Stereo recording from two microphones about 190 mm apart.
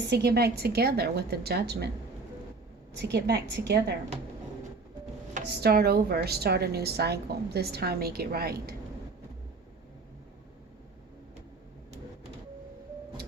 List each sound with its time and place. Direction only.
0.1 s a woman's voice: 60° right (ahead or behind)
3.0 s a woman's voice: 60° right (ahead or behind)
5.5 s a woman's voice: 60° right (ahead or behind)